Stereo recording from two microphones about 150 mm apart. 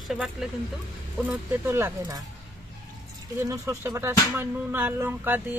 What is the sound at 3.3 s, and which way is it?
Speech, 20° right (ahead or behind).